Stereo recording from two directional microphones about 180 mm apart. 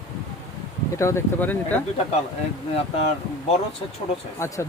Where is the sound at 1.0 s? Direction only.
15° left (ahead or behind).